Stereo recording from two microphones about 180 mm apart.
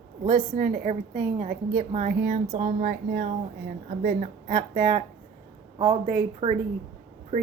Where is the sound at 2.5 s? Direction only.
35° right (ahead or behind).